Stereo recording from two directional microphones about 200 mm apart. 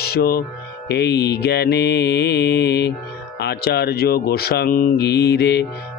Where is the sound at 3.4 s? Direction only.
55° left (ahead or behind).